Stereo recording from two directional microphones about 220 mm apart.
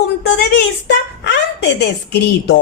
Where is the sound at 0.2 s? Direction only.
50° left (ahead or behind).